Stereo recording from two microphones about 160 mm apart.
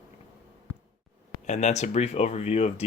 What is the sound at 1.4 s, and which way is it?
Speech, 45° left (ahead or behind).